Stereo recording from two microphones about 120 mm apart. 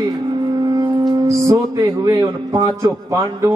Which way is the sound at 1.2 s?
25° right (ahead or behind).